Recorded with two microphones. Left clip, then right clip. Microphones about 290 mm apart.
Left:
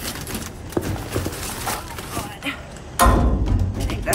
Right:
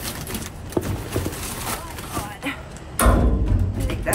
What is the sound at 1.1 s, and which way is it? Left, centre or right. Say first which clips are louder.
Clip-clop: left 1 dB; centre.